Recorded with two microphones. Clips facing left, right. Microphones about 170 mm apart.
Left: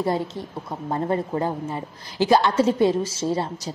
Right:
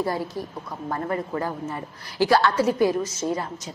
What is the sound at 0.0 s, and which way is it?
A woman's voice, 25° left (ahead or behind).